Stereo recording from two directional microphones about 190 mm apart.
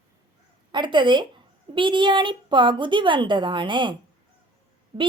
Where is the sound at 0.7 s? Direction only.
25° right (ahead or behind).